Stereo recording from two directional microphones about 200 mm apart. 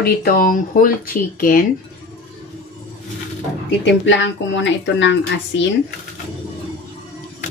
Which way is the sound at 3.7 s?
65° left (ahead or behind).